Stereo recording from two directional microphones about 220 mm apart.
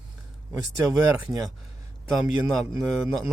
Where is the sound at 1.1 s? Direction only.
5° right (ahead or behind).